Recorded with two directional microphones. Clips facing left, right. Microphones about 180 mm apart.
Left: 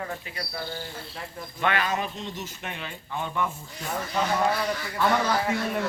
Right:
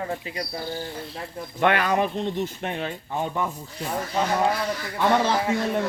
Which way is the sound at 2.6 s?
35° right (ahead or behind).